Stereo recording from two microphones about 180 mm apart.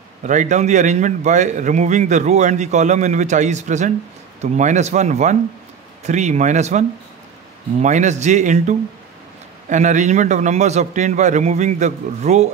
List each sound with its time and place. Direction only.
0.2 s a man's voice: 40° right (ahead or behind)